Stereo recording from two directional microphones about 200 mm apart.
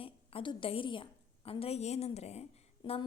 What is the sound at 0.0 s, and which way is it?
A woman's voice, 25° left (ahead or behind).